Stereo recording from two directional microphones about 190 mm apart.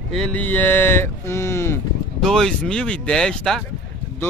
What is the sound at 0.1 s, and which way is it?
Speech, 5° left (ahead or behind).